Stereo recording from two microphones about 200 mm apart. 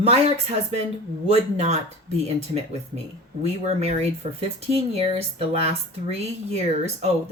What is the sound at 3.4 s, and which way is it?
Speech, 30° right (ahead or behind).